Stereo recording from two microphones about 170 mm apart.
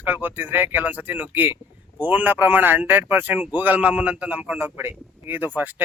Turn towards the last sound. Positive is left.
turn(degrees=-10)  # may be behind; listen again after turning